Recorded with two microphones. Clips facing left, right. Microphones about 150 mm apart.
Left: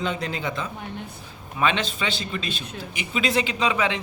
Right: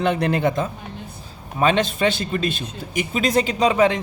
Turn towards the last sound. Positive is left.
turn(degrees=-45)  # may be behind; listen again after turning